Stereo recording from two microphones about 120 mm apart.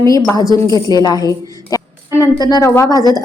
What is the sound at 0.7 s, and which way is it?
A woman's voice, 30° left (ahead or behind).